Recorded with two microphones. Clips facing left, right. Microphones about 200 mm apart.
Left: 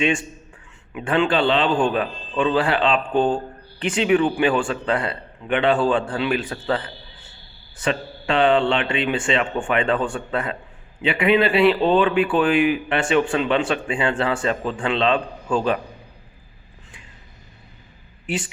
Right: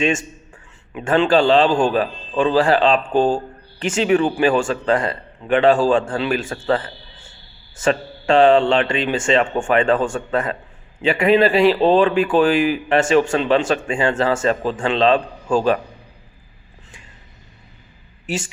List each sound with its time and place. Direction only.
0.0 s speech: 45° right (ahead or behind)
18.3 s speech: 45° right (ahead or behind)